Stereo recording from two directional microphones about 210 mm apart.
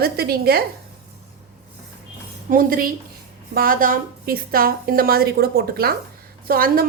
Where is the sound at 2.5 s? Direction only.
40° right (ahead or behind).